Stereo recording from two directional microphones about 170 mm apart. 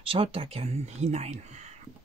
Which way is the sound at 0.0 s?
35° right (ahead or behind).